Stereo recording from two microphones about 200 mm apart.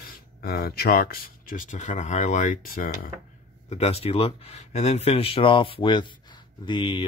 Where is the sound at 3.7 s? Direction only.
30° left (ahead or behind).